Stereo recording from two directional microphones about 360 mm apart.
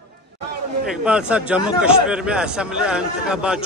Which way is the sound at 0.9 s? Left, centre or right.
Centre.